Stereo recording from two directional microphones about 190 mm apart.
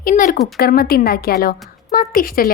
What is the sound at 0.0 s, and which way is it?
A woman's voice, 45° left (ahead or behind).